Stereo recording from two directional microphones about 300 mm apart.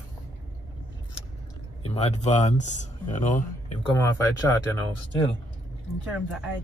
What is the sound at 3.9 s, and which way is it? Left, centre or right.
Speech, centre.